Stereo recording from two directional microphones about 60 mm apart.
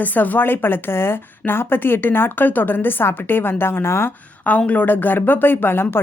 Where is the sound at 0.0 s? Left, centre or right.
Left.